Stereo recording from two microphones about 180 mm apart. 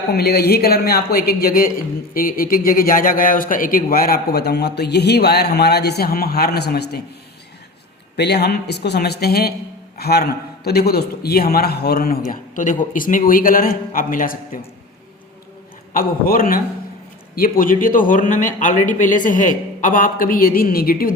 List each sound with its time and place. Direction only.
0.1 s a man's voice: 60° left (ahead or behind)
8.1 s a man's voice: 65° left (ahead or behind); by 14.6 s 50° left (ahead or behind)
15.9 s a man's voice: 50° left (ahead or behind)